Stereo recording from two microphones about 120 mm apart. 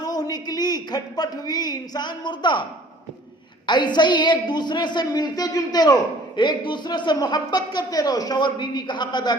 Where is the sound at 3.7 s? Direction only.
40° left (ahead or behind).